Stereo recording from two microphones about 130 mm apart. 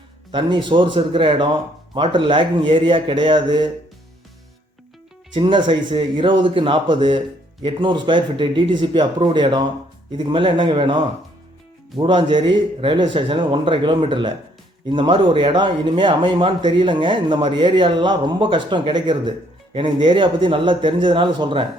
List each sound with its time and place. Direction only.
0.3 s speech: 40° right (ahead or behind)
5.3 s speech: 40° right (ahead or behind)